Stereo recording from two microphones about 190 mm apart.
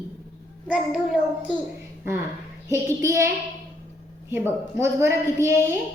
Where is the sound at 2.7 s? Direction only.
15° right (ahead or behind).